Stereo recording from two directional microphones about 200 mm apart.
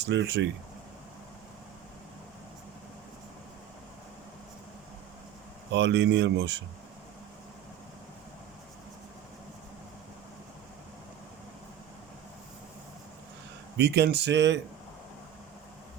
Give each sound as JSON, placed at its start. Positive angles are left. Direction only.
{"t": 0.0, "sound": "speech", "side_deg": -60}
{"t": 5.7, "sound": "speech", "side_deg": -60}
{"t": 13.7, "sound": "speech", "side_deg": -55}